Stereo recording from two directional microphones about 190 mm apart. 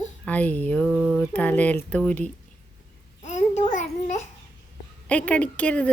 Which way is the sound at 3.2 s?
40° left (ahead or behind).